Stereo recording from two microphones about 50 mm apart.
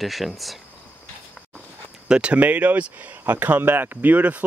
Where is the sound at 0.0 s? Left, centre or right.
Centre.